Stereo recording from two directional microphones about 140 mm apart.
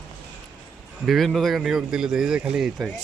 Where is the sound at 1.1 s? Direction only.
Centre (ahead or behind).